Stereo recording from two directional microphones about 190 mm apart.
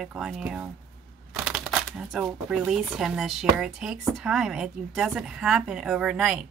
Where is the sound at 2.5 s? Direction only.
5° right (ahead or behind).